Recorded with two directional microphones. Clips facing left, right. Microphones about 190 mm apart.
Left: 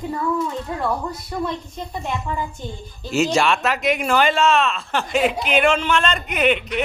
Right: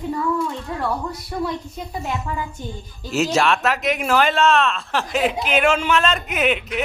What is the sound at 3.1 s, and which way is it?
Speech, centre (ahead or behind).